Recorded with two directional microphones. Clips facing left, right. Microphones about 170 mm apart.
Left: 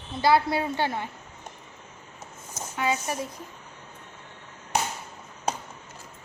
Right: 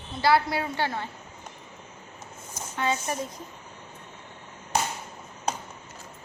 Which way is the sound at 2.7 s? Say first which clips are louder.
Even; 10° left (ahead or behind).